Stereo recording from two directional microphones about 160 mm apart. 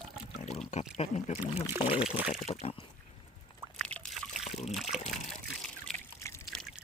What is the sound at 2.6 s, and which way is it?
Speech, 35° left (ahead or behind).